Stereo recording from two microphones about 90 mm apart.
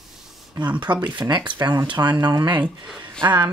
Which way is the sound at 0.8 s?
60° right (ahead or behind).